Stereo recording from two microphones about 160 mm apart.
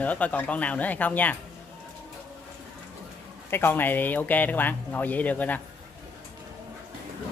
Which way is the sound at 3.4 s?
15° left (ahead or behind).